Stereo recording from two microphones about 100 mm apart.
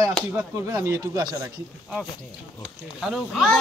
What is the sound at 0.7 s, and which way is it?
Speech, 30° right (ahead or behind).